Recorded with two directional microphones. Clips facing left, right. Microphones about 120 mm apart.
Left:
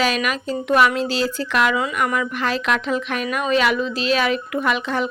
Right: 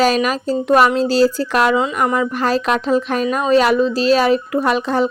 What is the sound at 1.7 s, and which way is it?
Speech, 25° right (ahead or behind).